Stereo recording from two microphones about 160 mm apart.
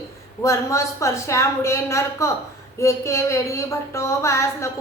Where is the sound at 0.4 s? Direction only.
20° left (ahead or behind).